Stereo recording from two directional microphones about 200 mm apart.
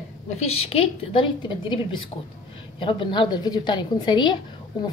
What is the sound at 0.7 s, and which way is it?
A woman's voice, 30° left (ahead or behind).